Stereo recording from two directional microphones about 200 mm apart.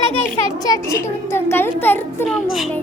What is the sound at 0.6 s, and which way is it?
A child's voice, 15° left (ahead or behind).